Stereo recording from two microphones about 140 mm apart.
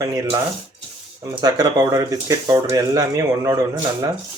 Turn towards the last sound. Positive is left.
turn(degrees=-25)  # may be behind; listen again after turning